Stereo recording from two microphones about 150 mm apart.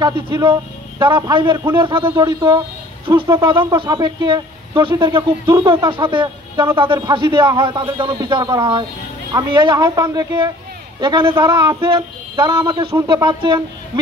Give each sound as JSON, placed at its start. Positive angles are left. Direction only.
{"t": 0.3, "sound": "a man's voice", "side_deg": -30}